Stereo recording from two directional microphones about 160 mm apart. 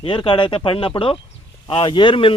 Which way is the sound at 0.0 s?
30° left (ahead or behind).